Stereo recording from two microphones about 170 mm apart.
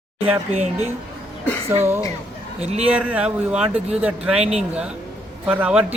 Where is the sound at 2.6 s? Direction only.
40° right (ahead or behind).